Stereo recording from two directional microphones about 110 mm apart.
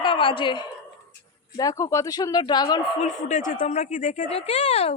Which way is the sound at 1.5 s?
30° left (ahead or behind).